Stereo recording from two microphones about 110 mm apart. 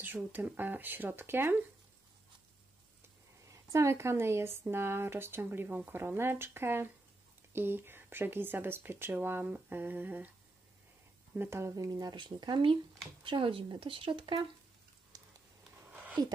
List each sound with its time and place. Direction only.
0.0 s speech: 20° right (ahead or behind)
3.4 s speech: 30° right (ahead or behind)
11.3 s speech: 20° right (ahead or behind)
11.7 s speech: 35° right (ahead or behind); by 14.4 s 50° right (ahead or behind)
15.1 s a sound: 35° right (ahead or behind)
16.2 s speech: 40° right (ahead or behind)